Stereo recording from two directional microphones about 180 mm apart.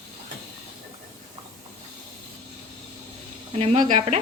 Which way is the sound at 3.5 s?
35° right (ahead or behind).